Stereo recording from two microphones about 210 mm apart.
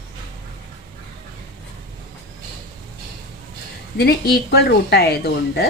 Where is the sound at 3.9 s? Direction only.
50° left (ahead or behind).